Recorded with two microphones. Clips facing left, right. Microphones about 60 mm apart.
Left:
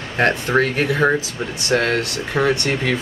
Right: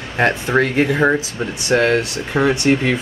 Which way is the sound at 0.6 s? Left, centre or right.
Right.